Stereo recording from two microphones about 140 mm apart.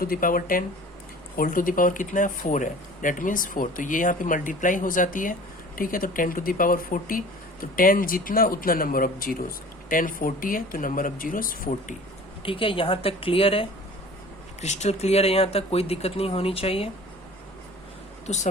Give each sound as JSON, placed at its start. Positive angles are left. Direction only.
{"t": 0.0, "sound": "speech", "side_deg": 85}
{"t": 1.4, "sound": "speech", "side_deg": 80}
{"t": 12.4, "sound": "speech", "side_deg": 40}
{"t": 14.6, "sound": "speech", "side_deg": 55}
{"t": 18.3, "sound": "speech", "side_deg": 50}